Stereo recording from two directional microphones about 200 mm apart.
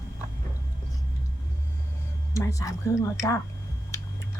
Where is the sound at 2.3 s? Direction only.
15° left (ahead or behind).